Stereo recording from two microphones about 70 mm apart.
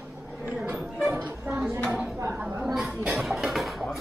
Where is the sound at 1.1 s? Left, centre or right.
Right.